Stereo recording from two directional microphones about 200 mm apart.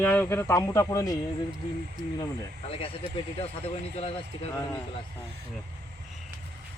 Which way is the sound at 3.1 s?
30° left (ahead or behind).